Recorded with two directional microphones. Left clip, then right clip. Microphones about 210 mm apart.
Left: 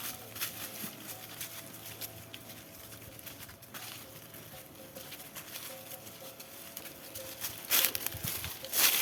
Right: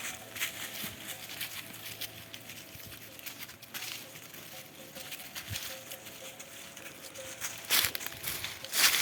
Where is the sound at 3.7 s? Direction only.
50° right (ahead or behind).